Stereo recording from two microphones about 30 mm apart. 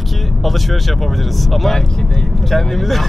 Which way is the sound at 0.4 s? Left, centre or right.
Centre.